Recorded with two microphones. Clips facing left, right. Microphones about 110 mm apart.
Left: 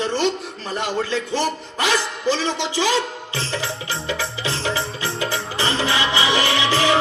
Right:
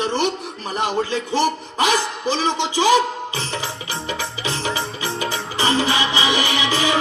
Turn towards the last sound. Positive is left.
turn(degrees=-15)  # may be behind; listen again after turning